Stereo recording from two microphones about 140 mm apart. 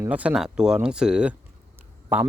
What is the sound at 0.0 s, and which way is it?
Speech, 10° right (ahead or behind).